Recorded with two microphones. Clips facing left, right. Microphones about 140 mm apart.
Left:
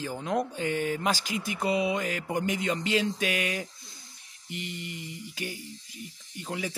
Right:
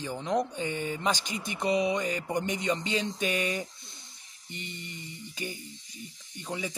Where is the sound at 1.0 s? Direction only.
5° left (ahead or behind).